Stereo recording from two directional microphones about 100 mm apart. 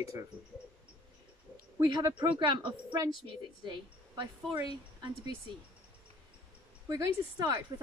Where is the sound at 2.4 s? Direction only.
60° right (ahead or behind).